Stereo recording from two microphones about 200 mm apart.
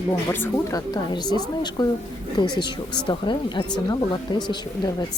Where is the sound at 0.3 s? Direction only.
10° left (ahead or behind).